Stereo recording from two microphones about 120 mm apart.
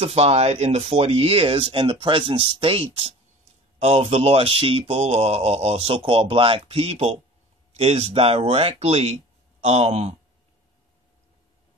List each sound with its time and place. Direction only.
0.0 s speech: 60° right (ahead or behind)